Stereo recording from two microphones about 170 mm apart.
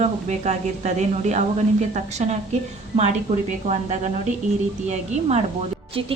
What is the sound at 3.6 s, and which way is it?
A woman's voice, 40° right (ahead or behind).